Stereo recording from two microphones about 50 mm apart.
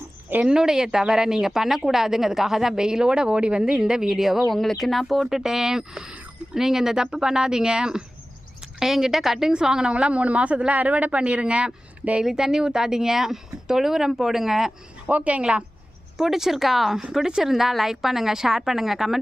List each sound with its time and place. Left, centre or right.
0.4 s a woman's voice: centre
12.2 s speech: centre
15.0 s a woman's voice: right
16.1 s speech: centre